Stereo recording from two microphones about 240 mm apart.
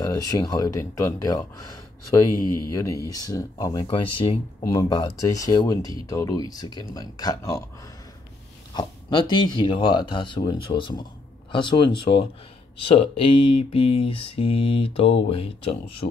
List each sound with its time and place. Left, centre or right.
0.0 s speech: centre
8.7 s mantra: centre